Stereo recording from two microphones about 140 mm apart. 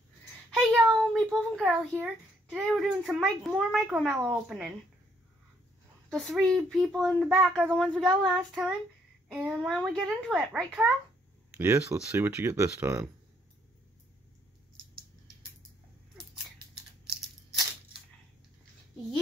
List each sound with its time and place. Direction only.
0.6 s a sound: centre (ahead or behind)
2.0 s a child's voice: 10° right (ahead or behind)
2.6 s speech: centre (ahead or behind)
6.0 s speech: centre (ahead or behind)
11.5 s speech: 20° right (ahead or behind)